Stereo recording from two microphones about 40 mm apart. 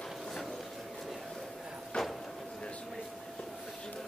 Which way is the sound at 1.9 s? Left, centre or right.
Left.